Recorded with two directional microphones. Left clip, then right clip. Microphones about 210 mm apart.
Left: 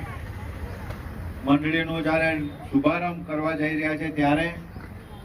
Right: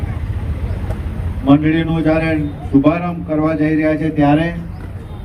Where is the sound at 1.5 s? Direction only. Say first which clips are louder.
Right 9 dB; 45° right (ahead or behind).